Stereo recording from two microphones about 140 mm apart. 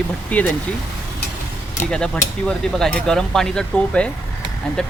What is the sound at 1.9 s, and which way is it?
Speech, 5° left (ahead or behind).